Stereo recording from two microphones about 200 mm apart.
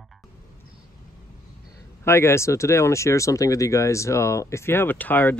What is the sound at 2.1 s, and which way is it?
Speech, 10° left (ahead or behind).